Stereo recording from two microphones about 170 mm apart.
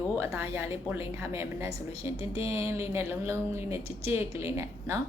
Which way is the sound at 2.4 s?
15° right (ahead or behind).